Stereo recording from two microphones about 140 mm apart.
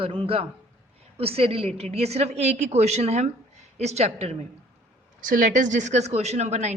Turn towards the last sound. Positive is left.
turn(degrees=-55)  # may be behind; listen again after turning